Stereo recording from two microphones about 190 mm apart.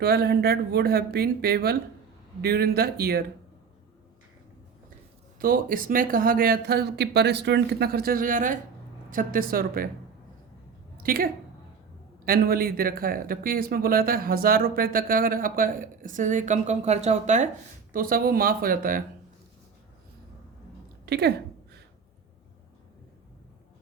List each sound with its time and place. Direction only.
0.0 s speech: 60° right (ahead or behind)
5.4 s speech: 50° right (ahead or behind)
10.9 s a woman's voice: 50° right (ahead or behind)
17.9 s speech: 50° right (ahead or behind)
21.1 s speech: 60° right (ahead or behind)